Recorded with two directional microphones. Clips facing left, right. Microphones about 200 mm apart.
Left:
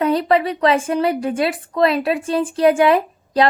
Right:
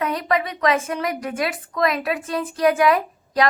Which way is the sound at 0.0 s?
30° left (ahead or behind).